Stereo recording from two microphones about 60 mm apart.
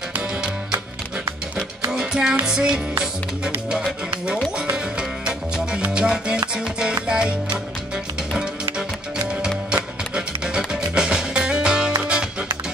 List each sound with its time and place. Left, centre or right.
1.9 s music: centre
3.0 s speech: centre
4.7 s salsa music: centre
7.1 s music: centre
9.7 s music: centre